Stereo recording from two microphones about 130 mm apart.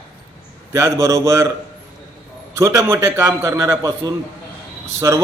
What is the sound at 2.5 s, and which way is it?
A man's voice, 25° right (ahead or behind).